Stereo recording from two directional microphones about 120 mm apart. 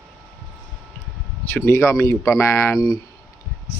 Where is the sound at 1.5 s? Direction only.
20° left (ahead or behind).